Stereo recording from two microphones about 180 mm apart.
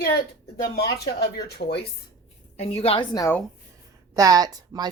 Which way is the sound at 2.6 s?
30° left (ahead or behind).